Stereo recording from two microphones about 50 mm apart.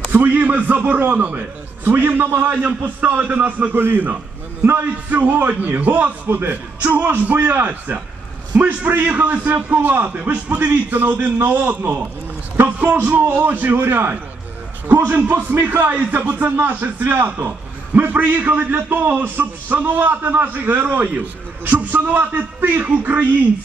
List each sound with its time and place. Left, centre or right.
0.1 s a man's voice: right
2.6 s a man's voice: right